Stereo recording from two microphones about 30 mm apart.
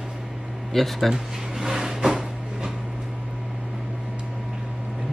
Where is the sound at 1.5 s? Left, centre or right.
Centre.